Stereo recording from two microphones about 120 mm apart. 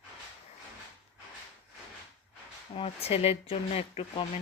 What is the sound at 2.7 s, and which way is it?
Speech, 55° left (ahead or behind).